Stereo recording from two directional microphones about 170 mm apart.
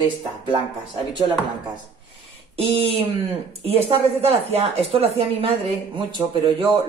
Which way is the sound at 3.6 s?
35° right (ahead or behind).